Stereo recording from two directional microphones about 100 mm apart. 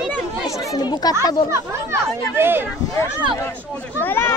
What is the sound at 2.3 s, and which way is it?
Speech, 20° right (ahead or behind).